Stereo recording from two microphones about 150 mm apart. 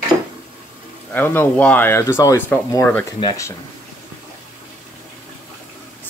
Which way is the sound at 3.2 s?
25° left (ahead or behind).